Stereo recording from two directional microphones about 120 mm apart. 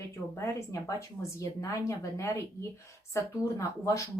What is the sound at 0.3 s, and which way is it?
Speech, 25° left (ahead or behind).